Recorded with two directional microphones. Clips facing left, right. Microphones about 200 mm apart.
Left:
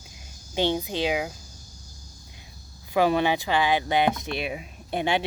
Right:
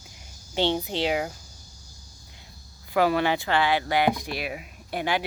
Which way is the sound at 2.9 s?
20° left (ahead or behind).